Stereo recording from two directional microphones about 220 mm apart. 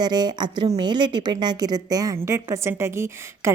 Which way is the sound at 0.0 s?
20° right (ahead or behind).